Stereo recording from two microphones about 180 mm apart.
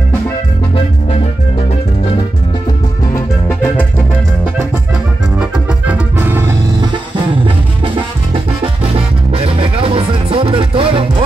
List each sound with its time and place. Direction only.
3.4 s music: 15° left (ahead or behind)
5.4 s music: 10° right (ahead or behind)
9.3 s music: 30° right (ahead or behind)